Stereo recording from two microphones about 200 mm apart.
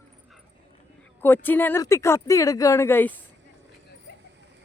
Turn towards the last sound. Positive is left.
turn(degrees=10)  # may be behind; listen again after turning